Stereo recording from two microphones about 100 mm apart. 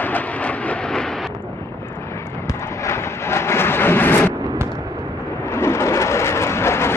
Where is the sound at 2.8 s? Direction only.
25° left (ahead or behind).